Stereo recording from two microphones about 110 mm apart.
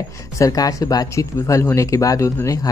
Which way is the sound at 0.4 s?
35° left (ahead or behind).